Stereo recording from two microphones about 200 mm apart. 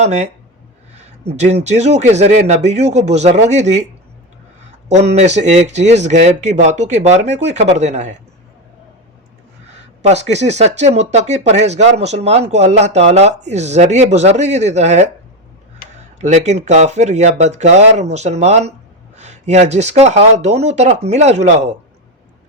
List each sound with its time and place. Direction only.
0.0 s speech: 35° right (ahead or behind)
4.9 s speech: 35° right (ahead or behind)
9.7 s speech: 35° right (ahead or behind)
16.2 s speech: 35° right (ahead or behind)